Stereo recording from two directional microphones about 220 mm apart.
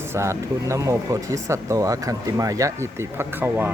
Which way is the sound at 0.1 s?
15° right (ahead or behind).